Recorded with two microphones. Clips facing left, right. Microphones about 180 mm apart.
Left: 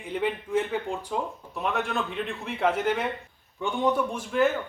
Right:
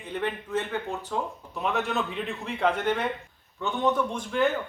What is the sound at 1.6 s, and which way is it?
Speech, centre (ahead or behind).